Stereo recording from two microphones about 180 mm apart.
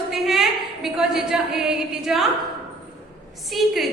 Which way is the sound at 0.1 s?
Centre (ahead or behind).